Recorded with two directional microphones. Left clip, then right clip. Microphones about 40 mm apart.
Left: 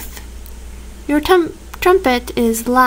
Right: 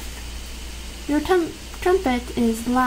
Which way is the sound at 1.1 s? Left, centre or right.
Left.